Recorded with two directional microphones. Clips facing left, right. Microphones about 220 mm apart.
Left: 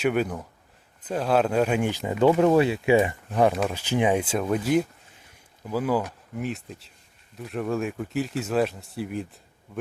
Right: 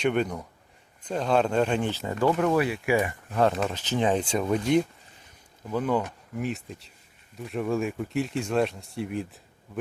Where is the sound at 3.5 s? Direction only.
5° left (ahead or behind).